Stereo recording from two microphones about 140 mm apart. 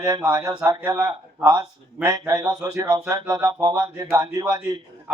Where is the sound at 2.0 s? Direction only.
25° right (ahead or behind).